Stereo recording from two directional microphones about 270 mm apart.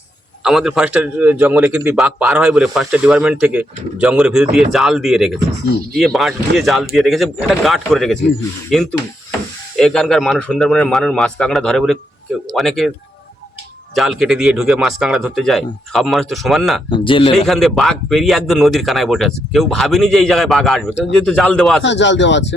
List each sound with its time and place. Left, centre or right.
0.4 s a man's voice: centre
13.9 s a man's voice: centre
16.9 s a man's voice: centre
17.3 s a man's voice: centre
21.8 s speech: left